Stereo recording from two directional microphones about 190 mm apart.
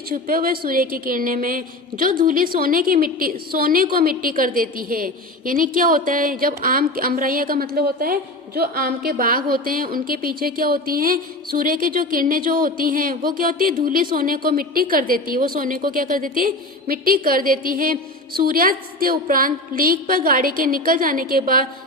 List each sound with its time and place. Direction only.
0.1 s a woman's voice: 50° right (ahead or behind)